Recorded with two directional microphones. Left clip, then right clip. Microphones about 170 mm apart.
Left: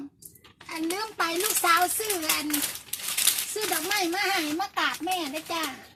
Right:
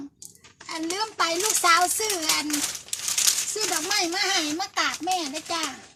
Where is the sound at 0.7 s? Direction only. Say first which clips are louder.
Right 2 dB; 30° right (ahead or behind).